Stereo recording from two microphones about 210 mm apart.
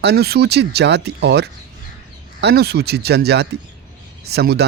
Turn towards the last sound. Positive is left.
turn(degrees=-50)  # may be behind; listen again after turning